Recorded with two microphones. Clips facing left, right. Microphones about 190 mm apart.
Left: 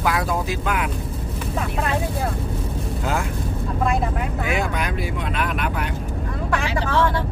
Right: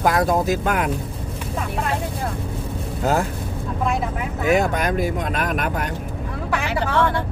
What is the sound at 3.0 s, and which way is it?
Speech, 40° right (ahead or behind).